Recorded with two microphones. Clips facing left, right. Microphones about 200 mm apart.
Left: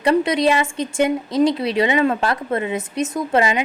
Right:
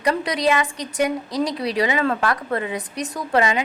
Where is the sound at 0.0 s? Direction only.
25° left (ahead or behind).